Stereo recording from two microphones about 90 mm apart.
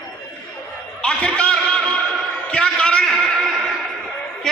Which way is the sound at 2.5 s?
10° left (ahead or behind).